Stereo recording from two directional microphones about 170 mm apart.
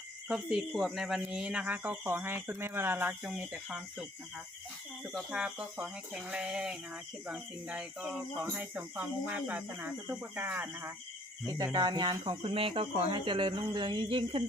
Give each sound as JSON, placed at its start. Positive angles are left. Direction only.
{"t": 0.3, "sound": "speech", "side_deg": -5}
{"t": 5.1, "sound": "speech", "side_deg": -5}
{"t": 11.4, "sound": "speech", "side_deg": -20}